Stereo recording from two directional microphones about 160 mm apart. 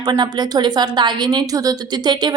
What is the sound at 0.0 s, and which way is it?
A woman's voice, 25° right (ahead or behind).